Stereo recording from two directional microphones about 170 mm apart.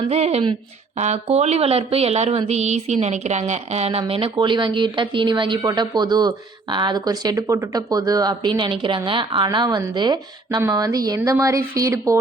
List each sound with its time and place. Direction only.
0.1 s speech: 40° right (ahead or behind); by 12.1 s 20° right (ahead or behind)